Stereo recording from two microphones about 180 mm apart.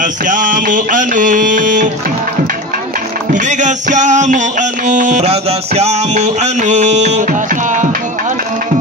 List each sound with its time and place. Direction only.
0.0 s music: 45° right (ahead or behind)
3.3 s music: 45° right (ahead or behind)